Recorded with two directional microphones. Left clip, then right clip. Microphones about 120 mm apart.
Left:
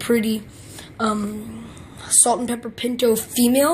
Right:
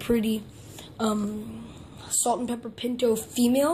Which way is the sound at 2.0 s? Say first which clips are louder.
Left 7 dB; 5° left (ahead or behind).